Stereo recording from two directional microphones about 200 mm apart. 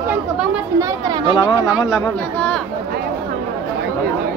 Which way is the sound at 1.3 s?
20° left (ahead or behind).